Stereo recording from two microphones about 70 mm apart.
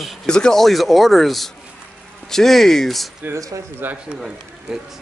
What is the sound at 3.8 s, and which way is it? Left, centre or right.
Speech, right.